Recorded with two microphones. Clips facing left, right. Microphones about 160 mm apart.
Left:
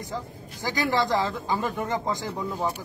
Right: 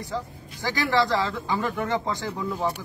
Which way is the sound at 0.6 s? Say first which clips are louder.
Right 2 dB; 20° left (ahead or behind).